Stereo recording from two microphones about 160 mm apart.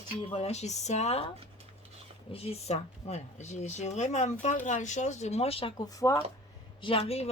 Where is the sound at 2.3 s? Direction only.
40° left (ahead or behind).